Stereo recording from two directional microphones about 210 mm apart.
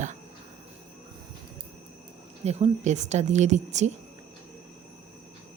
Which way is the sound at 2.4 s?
30° right (ahead or behind).